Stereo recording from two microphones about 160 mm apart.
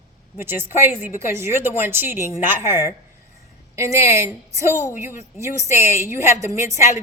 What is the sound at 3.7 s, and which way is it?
A woman's voice, 20° right (ahead or behind).